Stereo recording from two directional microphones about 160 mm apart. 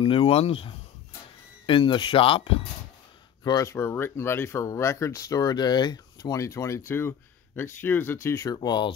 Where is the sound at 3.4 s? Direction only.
25° left (ahead or behind).